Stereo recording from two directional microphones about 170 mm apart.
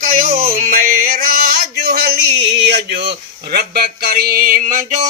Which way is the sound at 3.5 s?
65° right (ahead or behind).